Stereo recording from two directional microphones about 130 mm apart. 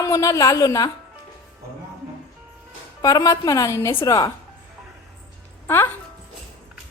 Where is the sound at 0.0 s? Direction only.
25° left (ahead or behind).